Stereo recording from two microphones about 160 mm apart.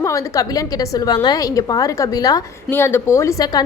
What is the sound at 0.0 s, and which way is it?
A woman's voice, 20° left (ahead or behind).